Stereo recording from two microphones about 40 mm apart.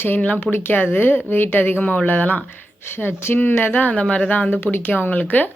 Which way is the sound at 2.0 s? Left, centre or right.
Left.